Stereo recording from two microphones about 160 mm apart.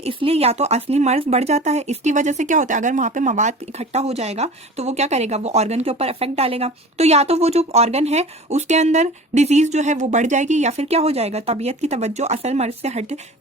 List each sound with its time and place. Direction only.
0.0 s speech: 35° right (ahead or behind)